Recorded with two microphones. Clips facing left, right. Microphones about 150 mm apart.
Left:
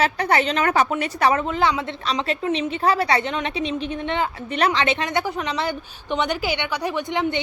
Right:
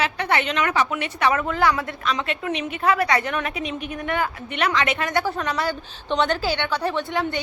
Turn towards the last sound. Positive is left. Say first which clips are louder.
# left 1 dB
turn(degrees=20)  # may be behind; listen again after turning